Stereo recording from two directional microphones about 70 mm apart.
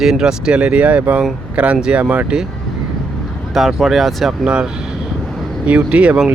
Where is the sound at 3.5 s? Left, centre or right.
Centre.